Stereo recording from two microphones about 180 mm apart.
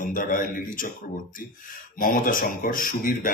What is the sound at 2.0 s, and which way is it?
Speech, 50° left (ahead or behind).